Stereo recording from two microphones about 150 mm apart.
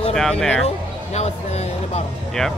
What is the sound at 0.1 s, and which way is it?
Speech, 5° left (ahead or behind).